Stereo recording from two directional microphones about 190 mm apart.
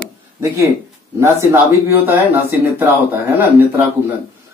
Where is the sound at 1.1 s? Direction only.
10° right (ahead or behind).